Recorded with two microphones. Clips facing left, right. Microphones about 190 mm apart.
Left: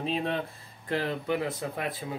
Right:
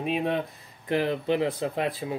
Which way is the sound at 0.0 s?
15° right (ahead or behind).